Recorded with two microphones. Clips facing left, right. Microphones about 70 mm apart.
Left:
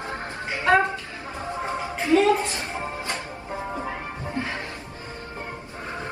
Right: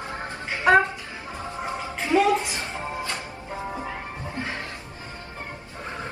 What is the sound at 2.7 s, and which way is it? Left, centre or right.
Music, left.